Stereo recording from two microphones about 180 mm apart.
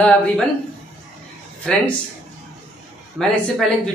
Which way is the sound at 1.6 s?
5° left (ahead or behind).